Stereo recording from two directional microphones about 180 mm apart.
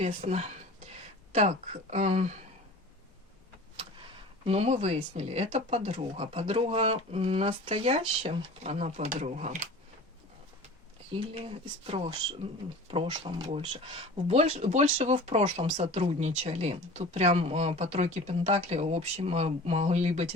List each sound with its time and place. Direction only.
0.2 s speech: 35° right (ahead or behind)
4.4 s speech: 35° right (ahead or behind)
11.1 s speech: 30° right (ahead or behind)
13.5 s speech: 35° right (ahead or behind)